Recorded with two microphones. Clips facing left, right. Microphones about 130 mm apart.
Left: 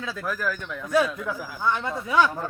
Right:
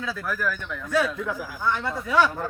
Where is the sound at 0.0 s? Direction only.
20° left (ahead or behind).